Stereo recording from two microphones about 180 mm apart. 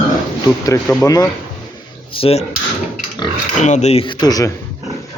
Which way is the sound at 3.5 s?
40° left (ahead or behind).